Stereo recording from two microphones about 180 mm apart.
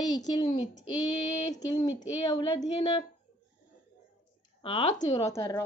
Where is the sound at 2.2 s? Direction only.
25° left (ahead or behind).